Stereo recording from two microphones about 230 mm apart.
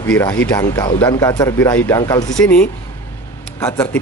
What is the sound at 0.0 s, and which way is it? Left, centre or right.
Speech, centre.